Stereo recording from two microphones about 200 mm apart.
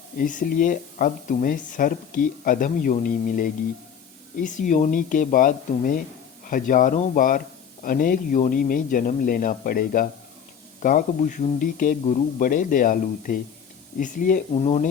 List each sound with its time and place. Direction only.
0.2 s speech: 40° left (ahead or behind)
14.5 s speech: 30° left (ahead or behind)